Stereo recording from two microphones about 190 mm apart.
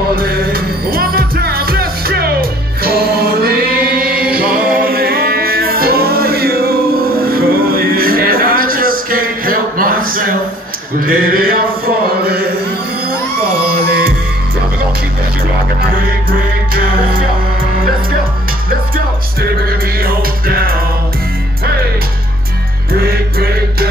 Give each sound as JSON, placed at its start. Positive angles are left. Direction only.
{"t": 0.1, "sound": "music", "side_deg": -55}
{"t": 11.0, "sound": "mantra", "side_deg": -50}
{"t": 20.0, "sound": "music", "side_deg": -50}
{"t": 23.0, "sound": "music", "side_deg": -55}